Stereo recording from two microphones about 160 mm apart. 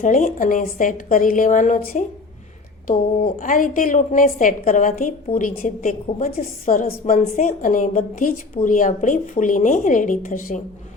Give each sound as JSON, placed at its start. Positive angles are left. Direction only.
{"t": 0.0, "sound": "a woman's voice", "side_deg": 50}
{"t": 3.2, "sound": "a woman's voice", "side_deg": 60}